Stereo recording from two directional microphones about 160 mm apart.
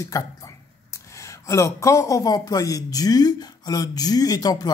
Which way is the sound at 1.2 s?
20° left (ahead or behind).